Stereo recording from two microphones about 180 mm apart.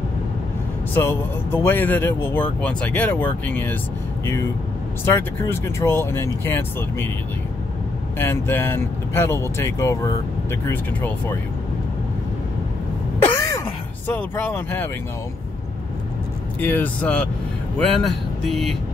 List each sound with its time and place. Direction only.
0.9 s speech: 10° left (ahead or behind)
5.0 s speech: 15° left (ahead or behind)
8.2 s speech: 10° left (ahead or behind)
13.3 s throat clearing: 20° left (ahead or behind)
14.0 s speech: 10° left (ahead or behind)
16.5 s speech: 10° left (ahead or behind)